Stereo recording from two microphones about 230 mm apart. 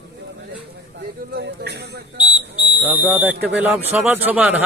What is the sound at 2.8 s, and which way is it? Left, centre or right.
A man's voice, centre.